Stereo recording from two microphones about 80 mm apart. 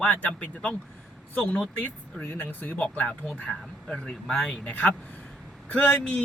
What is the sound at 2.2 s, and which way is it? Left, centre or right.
Speech, left.